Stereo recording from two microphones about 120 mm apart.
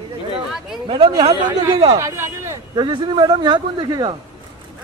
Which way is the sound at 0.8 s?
40° right (ahead or behind).